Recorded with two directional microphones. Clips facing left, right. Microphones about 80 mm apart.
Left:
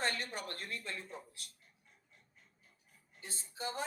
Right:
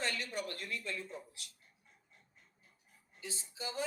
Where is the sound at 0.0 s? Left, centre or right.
Left.